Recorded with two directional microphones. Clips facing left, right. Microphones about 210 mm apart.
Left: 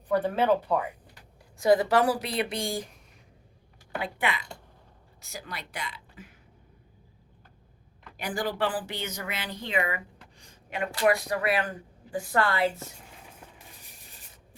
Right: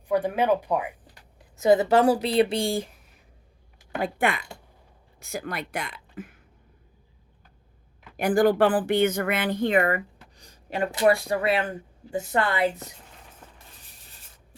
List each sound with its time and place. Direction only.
0.1 s speech: 15° right (ahead or behind); by 2.8 s 30° right (ahead or behind)
4.0 s a woman's voice: 50° right (ahead or behind)
8.1 s speech: 50° right (ahead or behind); by 12.9 s 20° right (ahead or behind)